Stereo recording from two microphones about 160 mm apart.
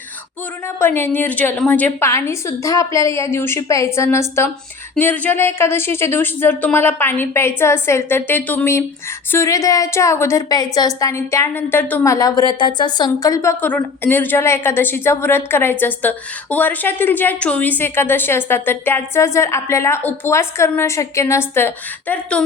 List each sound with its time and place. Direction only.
0.8 s a woman's voice: 15° left (ahead or behind)